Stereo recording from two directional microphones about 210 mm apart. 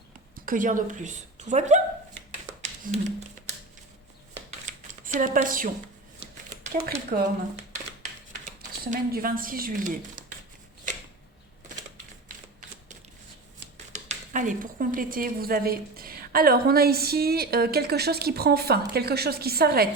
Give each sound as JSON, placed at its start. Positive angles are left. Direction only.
{"t": 0.4, "sound": "a woman's voice", "side_deg": -40}
{"t": 2.8, "sound": "a woman's voice", "side_deg": -40}
{"t": 4.6, "sound": "computer keyboard", "side_deg": -35}
{"t": 6.6, "sound": "speech", "side_deg": -40}
{"t": 8.3, "sound": "speech", "side_deg": -35}
{"t": 13.9, "sound": "a woman's voice", "side_deg": -35}